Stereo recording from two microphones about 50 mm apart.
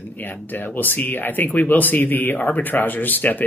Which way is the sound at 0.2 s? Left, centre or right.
Left.